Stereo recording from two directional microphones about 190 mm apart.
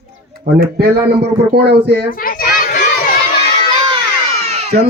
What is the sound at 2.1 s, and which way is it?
Children playing, 50° left (ahead or behind).